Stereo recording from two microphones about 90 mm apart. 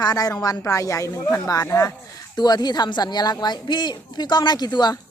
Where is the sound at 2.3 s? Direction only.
50° left (ahead or behind).